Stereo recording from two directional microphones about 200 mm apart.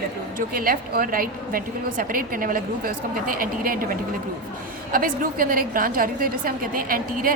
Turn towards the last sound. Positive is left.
turn(degrees=-45)  # may be behind; listen again after turning